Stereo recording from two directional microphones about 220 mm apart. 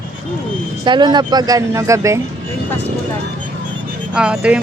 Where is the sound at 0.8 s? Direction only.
20° right (ahead or behind).